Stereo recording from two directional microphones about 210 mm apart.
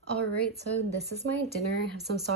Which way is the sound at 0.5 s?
50° right (ahead or behind).